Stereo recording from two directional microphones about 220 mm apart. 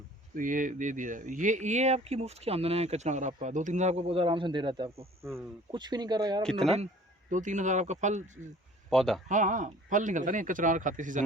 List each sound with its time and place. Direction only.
0.3 s speech: 35° right (ahead or behind); by 6.4 s 20° right (ahead or behind)
6.4 s speech: centre (ahead or behind)
7.3 s speech: 35° right (ahead or behind)
8.9 s speech: centre (ahead or behind)
9.3 s speech: 35° right (ahead or behind)